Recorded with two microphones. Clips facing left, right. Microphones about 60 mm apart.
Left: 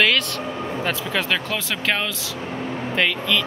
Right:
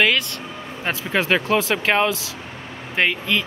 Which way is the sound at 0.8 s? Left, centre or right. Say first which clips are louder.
Right 4 dB; right.